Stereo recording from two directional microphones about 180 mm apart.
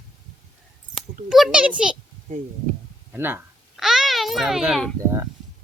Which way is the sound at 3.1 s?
10° right (ahead or behind).